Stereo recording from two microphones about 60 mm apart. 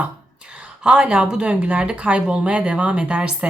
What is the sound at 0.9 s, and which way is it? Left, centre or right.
Speech, centre.